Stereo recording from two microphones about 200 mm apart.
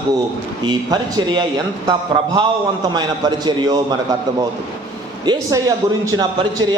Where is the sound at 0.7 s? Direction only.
20° right (ahead or behind).